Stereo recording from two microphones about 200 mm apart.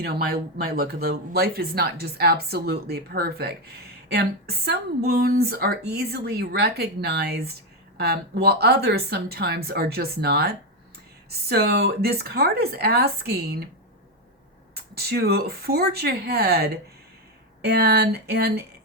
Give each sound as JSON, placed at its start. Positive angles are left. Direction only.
{"t": 0.0, "sound": "speech", "side_deg": -50}
{"t": 14.9, "sound": "speech", "side_deg": -50}